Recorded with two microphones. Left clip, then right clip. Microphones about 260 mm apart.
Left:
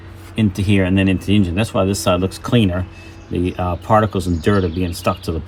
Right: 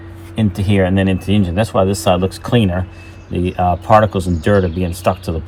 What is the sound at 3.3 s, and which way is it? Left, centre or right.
Speech, right.